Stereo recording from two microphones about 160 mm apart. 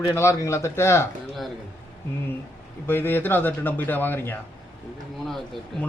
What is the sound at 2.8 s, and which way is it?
A man's voice, 15° left (ahead or behind).